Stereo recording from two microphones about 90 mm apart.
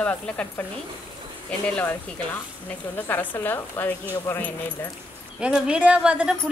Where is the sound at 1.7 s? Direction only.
15° left (ahead or behind).